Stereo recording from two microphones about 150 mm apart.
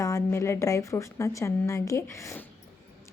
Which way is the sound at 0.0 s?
20° left (ahead or behind).